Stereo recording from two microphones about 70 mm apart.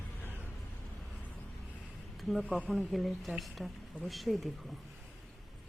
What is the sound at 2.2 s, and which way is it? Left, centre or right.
A woman's voice, centre.